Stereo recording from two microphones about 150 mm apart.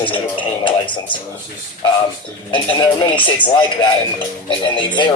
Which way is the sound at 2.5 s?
35° left (ahead or behind).